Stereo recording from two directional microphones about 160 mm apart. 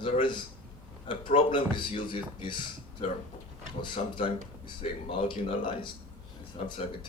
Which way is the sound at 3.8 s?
35° left (ahead or behind).